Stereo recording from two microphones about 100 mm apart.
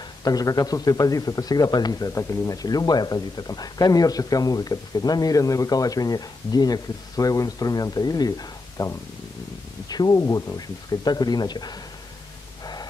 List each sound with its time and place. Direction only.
0.2 s speech: 40° left (ahead or behind)